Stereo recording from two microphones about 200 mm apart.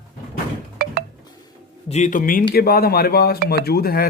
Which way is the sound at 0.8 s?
45° right (ahead or behind).